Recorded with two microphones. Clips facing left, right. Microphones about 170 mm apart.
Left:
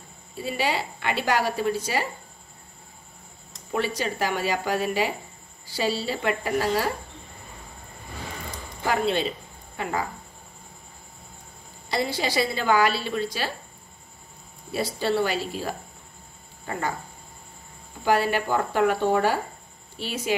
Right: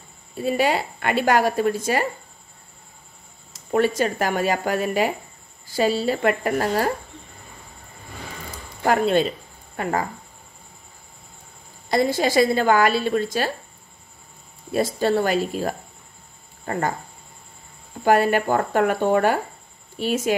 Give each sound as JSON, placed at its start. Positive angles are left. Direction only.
{"t": 0.4, "sound": "a woman's voice", "side_deg": -50}
{"t": 3.7, "sound": "a woman's voice", "side_deg": -50}
{"t": 8.8, "sound": "a woman's voice", "side_deg": -50}
{"t": 11.9, "sound": "a woman's voice", "side_deg": -50}
{"t": 14.7, "sound": "a woman's voice", "side_deg": -45}
{"t": 18.0, "sound": "a woman's voice", "side_deg": -50}